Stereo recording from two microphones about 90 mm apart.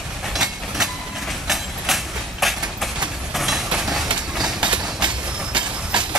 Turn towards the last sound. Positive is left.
turn(degrees=-10)  # may be behind; listen again after turning